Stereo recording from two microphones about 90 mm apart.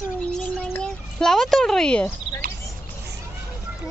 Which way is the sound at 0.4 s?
15° left (ahead or behind).